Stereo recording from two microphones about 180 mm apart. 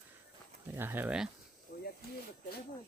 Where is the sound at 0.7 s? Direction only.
10° right (ahead or behind).